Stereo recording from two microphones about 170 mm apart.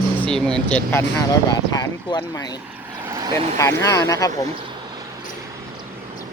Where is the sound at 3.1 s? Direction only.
20° right (ahead or behind).